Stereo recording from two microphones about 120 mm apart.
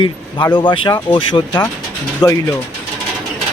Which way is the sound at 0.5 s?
40° left (ahead or behind).